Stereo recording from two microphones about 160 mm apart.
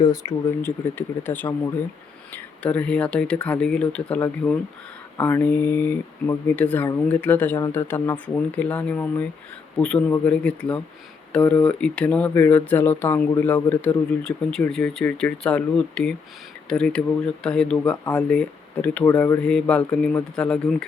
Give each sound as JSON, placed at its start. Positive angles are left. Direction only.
{"t": 0.0, "sound": "speech", "side_deg": 20}